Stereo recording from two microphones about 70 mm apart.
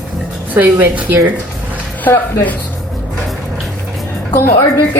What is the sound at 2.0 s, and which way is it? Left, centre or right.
Speech, left.